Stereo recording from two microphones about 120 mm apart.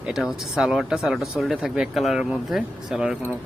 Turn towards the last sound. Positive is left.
turn(degrees=-5)  # may be behind; listen again after turning